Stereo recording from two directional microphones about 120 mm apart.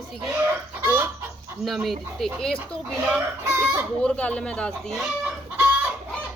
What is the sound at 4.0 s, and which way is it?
Speech, 10° left (ahead or behind).